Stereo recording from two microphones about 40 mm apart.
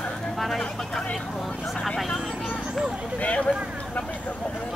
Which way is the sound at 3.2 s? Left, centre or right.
Left.